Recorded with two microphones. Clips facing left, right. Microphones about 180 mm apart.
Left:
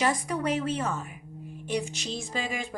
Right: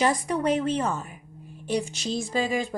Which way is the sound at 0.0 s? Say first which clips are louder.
Right 3 dB; 30° right (ahead or behind).